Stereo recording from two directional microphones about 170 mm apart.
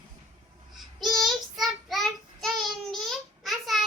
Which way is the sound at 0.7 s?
Centre (ahead or behind).